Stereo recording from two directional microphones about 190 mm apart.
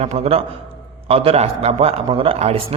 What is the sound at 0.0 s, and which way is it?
A man's voice, 30° right (ahead or behind).